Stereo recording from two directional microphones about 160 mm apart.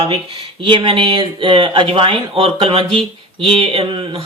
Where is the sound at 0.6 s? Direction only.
30° right (ahead or behind).